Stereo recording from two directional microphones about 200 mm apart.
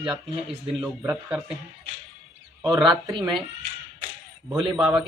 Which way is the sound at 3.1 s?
25° right (ahead or behind).